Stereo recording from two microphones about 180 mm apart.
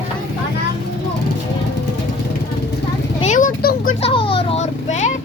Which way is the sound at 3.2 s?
45° left (ahead or behind).